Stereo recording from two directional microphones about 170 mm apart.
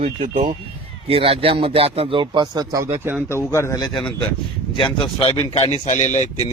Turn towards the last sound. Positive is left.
turn(degrees=45)  # may be behind; listen again after turning